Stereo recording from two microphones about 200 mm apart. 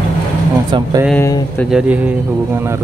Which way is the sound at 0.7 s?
25° right (ahead or behind).